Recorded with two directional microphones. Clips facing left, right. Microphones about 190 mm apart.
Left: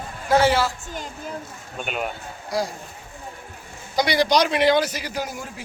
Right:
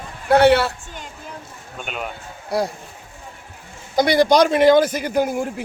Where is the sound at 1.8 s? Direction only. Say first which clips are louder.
Left 2 dB; 5° left (ahead or behind).